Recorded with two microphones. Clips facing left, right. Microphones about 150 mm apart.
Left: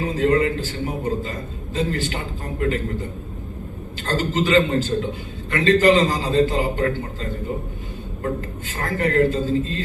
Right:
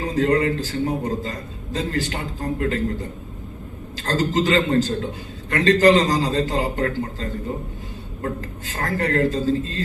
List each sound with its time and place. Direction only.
0.0 s a man's voice: 35° right (ahead or behind)
4.0 s a man's voice: 40° right (ahead or behind)